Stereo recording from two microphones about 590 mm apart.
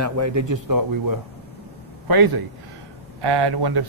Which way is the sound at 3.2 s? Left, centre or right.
Right.